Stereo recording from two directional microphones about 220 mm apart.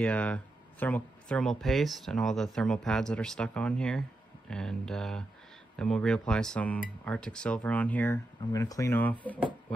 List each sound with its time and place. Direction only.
0.0 s speech: 5° left (ahead or behind)